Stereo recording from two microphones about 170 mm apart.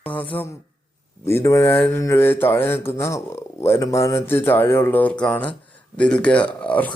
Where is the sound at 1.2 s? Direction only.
15° left (ahead or behind).